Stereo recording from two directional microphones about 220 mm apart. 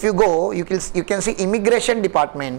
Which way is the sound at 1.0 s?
15° right (ahead or behind).